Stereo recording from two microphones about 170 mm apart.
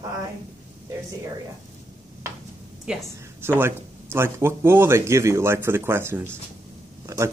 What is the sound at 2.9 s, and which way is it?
A woman's voice, 5° right (ahead or behind).